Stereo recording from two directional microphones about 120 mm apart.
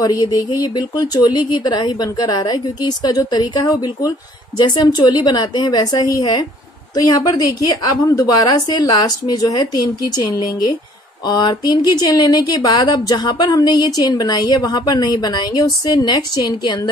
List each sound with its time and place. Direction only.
0.0 s a woman's voice: 30° left (ahead or behind)